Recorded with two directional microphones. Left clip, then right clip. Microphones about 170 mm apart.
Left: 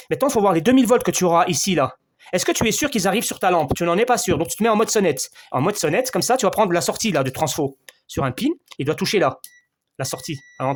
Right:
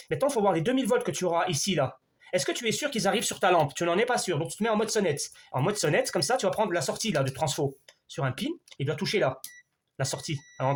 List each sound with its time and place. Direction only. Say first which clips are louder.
0.1 s speech: left 7 dB; 50° left (ahead or behind)
10.0 s speech: left 5 dB; 40° left (ahead or behind)